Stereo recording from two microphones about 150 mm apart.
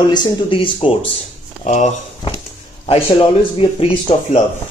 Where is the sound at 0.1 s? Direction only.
30° left (ahead or behind).